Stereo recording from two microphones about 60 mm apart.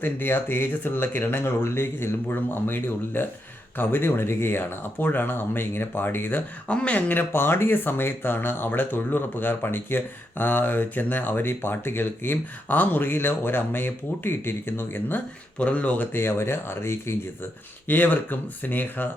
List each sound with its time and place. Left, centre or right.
0.0 s speech: left
6.7 s speech: left
15.5 s speech: left
16.1 s speech: left
17.8 s speech: left